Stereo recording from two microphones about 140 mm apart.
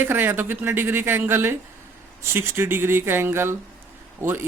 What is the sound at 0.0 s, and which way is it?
A man's voice, 15° right (ahead or behind).